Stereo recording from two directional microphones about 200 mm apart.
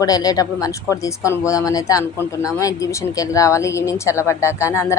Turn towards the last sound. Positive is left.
turn(degrees=15)  # may be behind; listen again after turning